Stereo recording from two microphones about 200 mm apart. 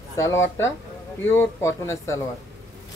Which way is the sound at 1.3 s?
10° left (ahead or behind).